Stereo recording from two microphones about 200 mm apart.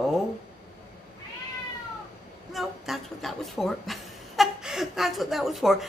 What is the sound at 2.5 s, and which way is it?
Speech, centre (ahead or behind).